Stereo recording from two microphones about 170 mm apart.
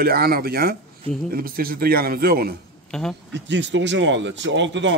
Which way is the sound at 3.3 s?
90° right.